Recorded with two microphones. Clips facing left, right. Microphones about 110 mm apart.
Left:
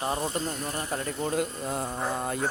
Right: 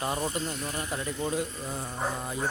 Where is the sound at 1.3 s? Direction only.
60° left (ahead or behind).